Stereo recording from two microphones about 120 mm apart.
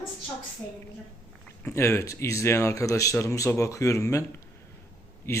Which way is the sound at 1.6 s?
25° left (ahead or behind).